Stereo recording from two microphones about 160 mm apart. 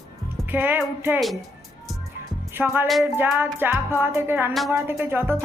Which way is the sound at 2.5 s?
15° right (ahead or behind).